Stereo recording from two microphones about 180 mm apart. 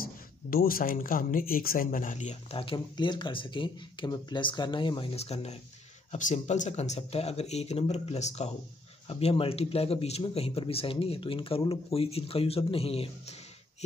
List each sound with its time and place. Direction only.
0.0 s speech: 55° left (ahead or behind)
2.5 s speech: 30° left (ahead or behind)